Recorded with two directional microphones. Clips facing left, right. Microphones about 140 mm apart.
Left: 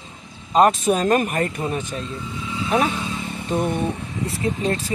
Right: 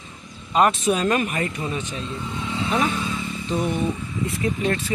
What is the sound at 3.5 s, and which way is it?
Speech, 50° left (ahead or behind).